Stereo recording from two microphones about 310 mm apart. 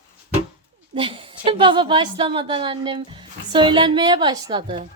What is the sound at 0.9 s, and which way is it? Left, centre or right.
A woman's voice, centre.